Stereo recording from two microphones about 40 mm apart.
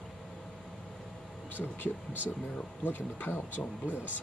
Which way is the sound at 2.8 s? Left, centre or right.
Left.